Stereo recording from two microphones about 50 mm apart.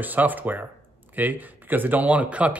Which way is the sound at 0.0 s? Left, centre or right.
Right.